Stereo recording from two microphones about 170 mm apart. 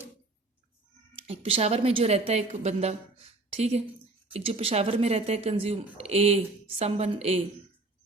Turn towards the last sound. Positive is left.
turn(degrees=-35)  # may be behind; listen again after turning